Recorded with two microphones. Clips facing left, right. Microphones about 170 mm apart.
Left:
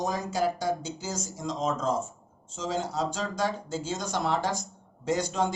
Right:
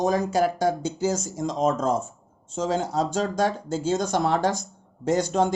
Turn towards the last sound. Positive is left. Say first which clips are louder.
# right 6 dB
turn(degrees=-45)  # may be behind; listen again after turning